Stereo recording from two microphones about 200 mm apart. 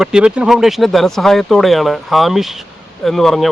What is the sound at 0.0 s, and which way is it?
Speech, 5° right (ahead or behind).